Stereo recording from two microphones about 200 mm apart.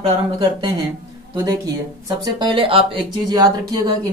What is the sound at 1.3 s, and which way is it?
Speech, 20° right (ahead or behind).